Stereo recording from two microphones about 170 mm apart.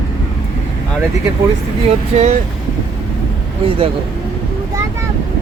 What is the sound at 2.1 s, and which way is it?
Speech, 40° right (ahead or behind).